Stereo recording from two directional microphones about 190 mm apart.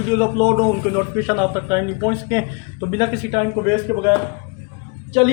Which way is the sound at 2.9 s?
30° right (ahead or behind).